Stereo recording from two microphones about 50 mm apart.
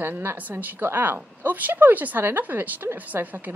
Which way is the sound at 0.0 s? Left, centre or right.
Right.